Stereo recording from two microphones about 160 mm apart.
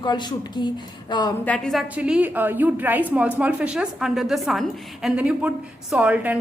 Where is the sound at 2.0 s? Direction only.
5° right (ahead or behind).